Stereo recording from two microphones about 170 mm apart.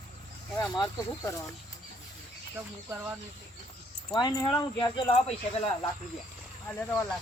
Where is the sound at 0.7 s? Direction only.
25° left (ahead or behind).